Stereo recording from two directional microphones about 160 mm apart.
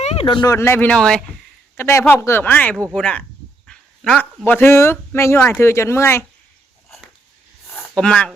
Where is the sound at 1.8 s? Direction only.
15° left (ahead or behind).